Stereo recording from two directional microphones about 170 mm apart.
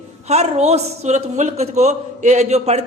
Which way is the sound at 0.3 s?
40° right (ahead or behind).